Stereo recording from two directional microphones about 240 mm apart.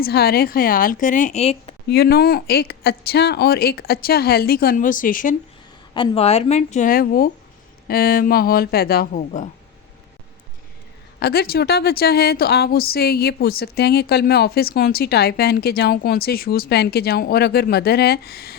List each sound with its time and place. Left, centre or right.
0.0 s a woman's voice: left
1.9 s a woman's voice: left
5.9 s a woman's voice: left
11.2 s a woman's voice: left